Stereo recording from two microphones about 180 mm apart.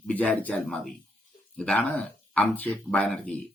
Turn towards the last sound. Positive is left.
turn(degrees=5)  # may be behind; listen again after turning